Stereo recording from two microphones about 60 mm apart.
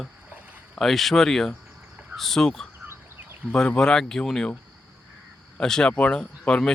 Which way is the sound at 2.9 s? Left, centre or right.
Right.